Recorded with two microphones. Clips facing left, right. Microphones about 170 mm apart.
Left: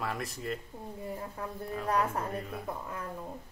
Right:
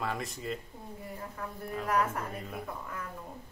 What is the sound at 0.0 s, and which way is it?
Speech, centre (ahead or behind).